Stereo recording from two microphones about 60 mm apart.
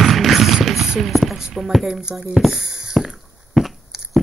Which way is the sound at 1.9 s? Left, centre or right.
Centre.